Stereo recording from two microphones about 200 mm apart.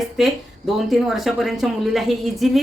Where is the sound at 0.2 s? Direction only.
Centre (ahead or behind).